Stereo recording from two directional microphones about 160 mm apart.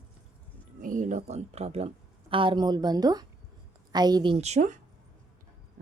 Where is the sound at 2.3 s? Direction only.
30° right (ahead or behind).